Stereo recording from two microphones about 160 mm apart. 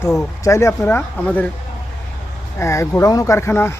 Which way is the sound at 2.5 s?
20° left (ahead or behind).